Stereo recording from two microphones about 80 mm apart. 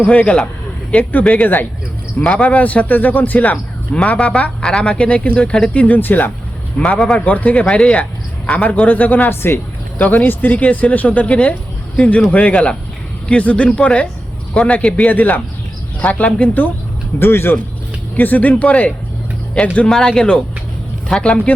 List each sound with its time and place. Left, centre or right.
0.0 s speech: centre
6.9 s speech: centre
7.2 s speech: centre
17.2 s speech: left; by 21.5 s centre